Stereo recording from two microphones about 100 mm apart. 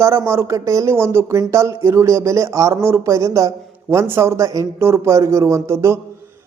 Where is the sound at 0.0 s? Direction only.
25° right (ahead or behind).